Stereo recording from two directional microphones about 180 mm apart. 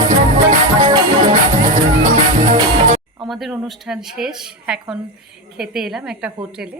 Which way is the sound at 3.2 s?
Centre (ahead or behind).